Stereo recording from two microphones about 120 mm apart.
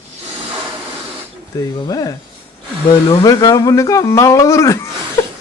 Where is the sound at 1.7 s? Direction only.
30° left (ahead or behind).